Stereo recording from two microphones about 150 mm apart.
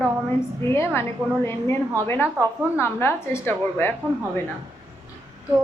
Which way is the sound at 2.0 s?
15° left (ahead or behind).